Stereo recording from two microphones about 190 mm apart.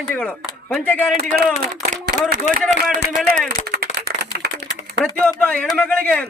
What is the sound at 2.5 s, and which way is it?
Speech, 40° left (ahead or behind).